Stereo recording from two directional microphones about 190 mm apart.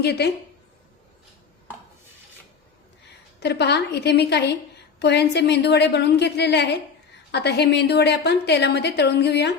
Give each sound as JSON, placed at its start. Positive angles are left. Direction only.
{"t": 0.0, "sound": "a woman's voice", "side_deg": 60}
{"t": 3.4, "sound": "a woman's voice", "side_deg": 60}